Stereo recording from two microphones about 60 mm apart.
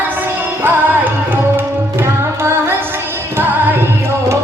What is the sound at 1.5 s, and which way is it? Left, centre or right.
Tabla, right.